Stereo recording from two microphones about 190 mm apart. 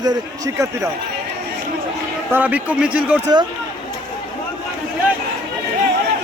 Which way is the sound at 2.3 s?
10° right (ahead or behind).